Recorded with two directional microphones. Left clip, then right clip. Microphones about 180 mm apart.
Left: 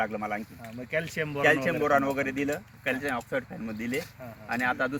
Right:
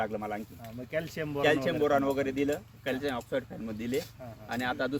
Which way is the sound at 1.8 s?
15° right (ahead or behind).